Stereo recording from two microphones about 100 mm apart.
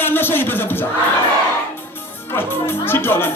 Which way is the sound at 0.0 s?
20° left (ahead or behind).